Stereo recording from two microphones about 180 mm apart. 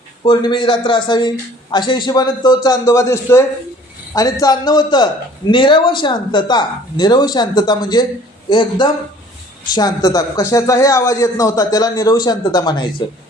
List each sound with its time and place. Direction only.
0.3 s a man's voice: 25° left (ahead or behind)